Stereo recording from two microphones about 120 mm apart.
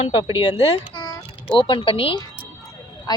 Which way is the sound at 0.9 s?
40° left (ahead or behind).